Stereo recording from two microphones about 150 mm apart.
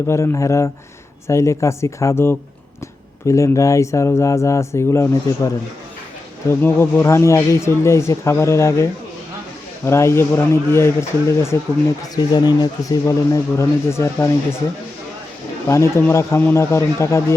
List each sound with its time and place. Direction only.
0.1 s speech: 20° left (ahead or behind)
6.5 s speech: 15° left (ahead or behind)
15.6 s speech: 20° left (ahead or behind)